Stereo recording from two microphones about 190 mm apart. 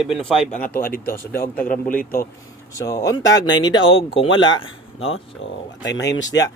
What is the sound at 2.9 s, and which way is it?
Speech, 20° left (ahead or behind).